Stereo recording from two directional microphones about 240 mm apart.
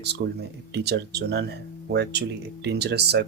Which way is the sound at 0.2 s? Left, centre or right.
Right.